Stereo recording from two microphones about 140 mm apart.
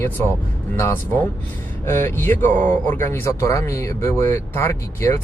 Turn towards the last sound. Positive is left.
turn(degrees=20)  # may be behind; listen again after turning